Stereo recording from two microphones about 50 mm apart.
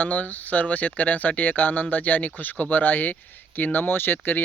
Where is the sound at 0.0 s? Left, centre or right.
Left.